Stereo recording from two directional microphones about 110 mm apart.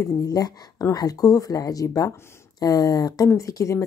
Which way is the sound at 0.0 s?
35° left (ahead or behind).